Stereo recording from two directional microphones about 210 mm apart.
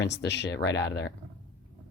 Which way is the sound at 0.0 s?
55° left (ahead or behind).